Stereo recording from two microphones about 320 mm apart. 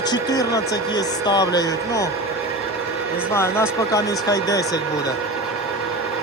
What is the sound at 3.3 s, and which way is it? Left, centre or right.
A man's voice, centre.